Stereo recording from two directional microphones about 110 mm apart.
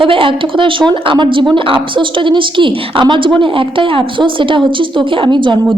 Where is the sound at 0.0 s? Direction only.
50° right (ahead or behind).